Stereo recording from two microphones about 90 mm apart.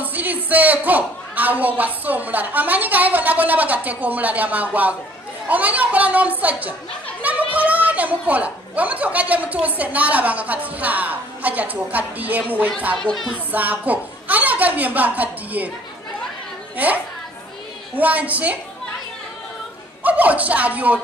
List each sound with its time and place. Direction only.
0.0 s a man's voice: 20° right (ahead or behind)
7.5 s speech: 15° right (ahead or behind)
12.9 s speech: 5° left (ahead or behind)
13.5 s a man's voice: 20° right (ahead or behind)
16.7 s a child's voice: 20° right (ahead or behind)
20.0 s speech: 15° right (ahead or behind)